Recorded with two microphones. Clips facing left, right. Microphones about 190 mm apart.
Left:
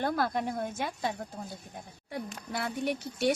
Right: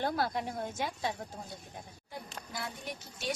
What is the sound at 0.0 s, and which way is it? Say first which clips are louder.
Speech: left 3 dB; 55° left (ahead or behind).